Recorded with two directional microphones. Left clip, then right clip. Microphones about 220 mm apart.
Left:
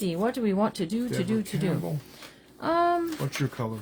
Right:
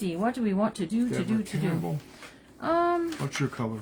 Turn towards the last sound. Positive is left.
turn(degrees=30)  # may be behind; listen again after turning